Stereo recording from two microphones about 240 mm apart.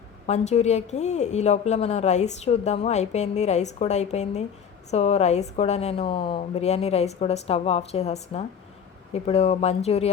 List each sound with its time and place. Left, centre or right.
0.3 s a woman's voice: left